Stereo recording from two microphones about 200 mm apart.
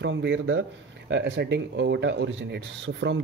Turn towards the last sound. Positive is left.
turn(degrees=-60)  # may be behind; listen again after turning